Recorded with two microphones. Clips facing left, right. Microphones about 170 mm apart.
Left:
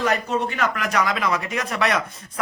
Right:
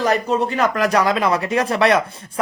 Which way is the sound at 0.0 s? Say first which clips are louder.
Right 4 dB; 35° right (ahead or behind).